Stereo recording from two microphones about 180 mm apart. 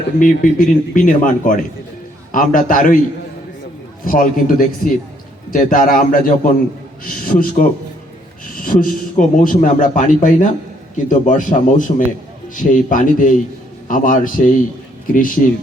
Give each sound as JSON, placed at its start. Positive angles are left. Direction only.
{"t": 0.2, "sound": "a man's voice", "side_deg": 50}
{"t": 4.0, "sound": "a man's voice", "side_deg": 50}